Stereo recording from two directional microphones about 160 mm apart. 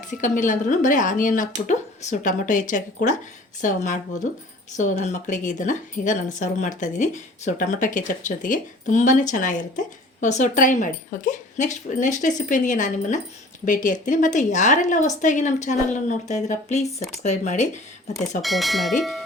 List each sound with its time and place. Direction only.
0.1 s speech: 55° left (ahead or behind)
18.4 s speech: centre (ahead or behind)